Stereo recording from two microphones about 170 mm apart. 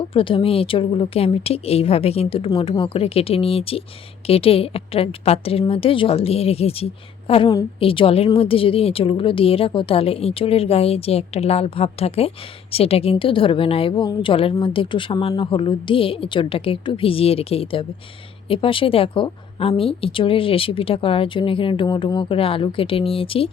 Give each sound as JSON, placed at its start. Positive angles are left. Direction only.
{"t": 0.1, "sound": "a woman's voice", "side_deg": 30}